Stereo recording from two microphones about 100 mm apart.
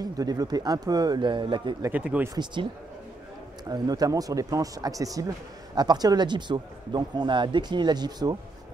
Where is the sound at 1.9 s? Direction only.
15° right (ahead or behind).